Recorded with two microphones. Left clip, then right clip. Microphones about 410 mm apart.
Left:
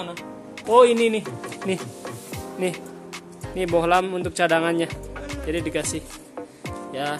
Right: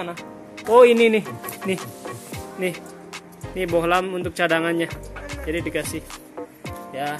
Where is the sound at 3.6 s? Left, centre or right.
Centre.